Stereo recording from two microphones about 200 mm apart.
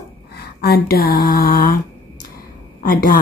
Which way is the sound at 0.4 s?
50° left (ahead or behind).